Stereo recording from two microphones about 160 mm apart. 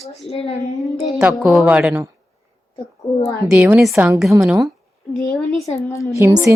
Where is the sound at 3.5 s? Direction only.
10° right (ahead or behind).